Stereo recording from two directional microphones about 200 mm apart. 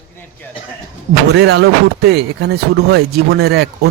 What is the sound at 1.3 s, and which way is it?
Speech, 60° right (ahead or behind).